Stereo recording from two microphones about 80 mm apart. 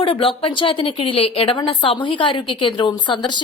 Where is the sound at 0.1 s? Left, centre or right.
Left.